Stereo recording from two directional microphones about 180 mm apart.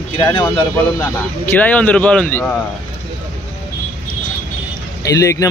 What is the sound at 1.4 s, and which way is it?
Speech, 10° left (ahead or behind).